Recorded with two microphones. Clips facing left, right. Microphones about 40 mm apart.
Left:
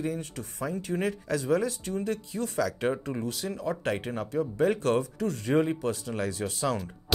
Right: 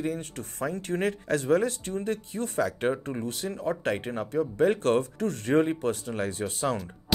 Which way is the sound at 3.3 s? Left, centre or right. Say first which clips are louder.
Right 3 dB; right.